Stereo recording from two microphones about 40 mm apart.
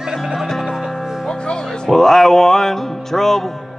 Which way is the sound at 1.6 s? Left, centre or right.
Centre.